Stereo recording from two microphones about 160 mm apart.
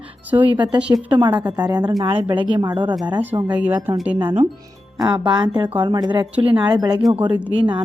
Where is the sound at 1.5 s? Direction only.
25° right (ahead or behind).